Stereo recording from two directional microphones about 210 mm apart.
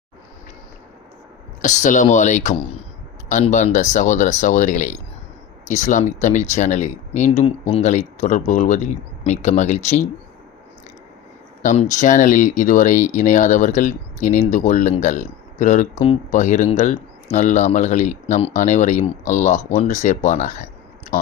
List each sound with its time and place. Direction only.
1.6 s speech: 35° left (ahead or behind)
11.6 s speech: 35° left (ahead or behind)